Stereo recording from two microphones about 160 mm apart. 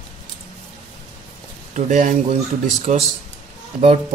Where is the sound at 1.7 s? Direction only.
50° right (ahead or behind).